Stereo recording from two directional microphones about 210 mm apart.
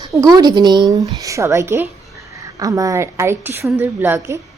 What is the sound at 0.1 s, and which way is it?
A woman's voice, 15° right (ahead or behind).